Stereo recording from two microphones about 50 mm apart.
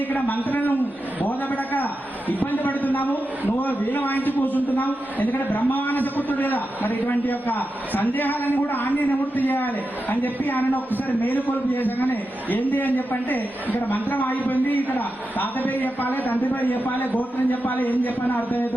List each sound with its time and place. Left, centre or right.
0.4 s a man's voice: left